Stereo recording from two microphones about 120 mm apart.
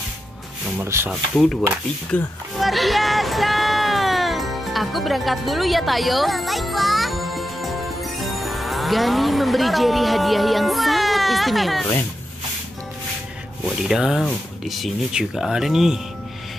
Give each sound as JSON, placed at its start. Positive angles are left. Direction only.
{"t": 0.7, "sound": "speech", "side_deg": -20}
{"t": 1.3, "sound": "speech", "side_deg": 0}
{"t": 2.6, "sound": "music", "side_deg": 0}
{"t": 13.8, "sound": "speech", "side_deg": -5}